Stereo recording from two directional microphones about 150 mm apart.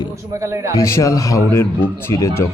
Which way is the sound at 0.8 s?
20° left (ahead or behind).